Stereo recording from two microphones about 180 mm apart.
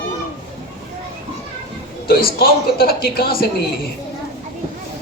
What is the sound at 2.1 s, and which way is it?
A woman's voice, 55° left (ahead or behind).